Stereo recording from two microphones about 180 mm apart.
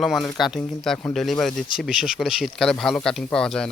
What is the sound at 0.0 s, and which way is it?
Speech, centre (ahead or behind).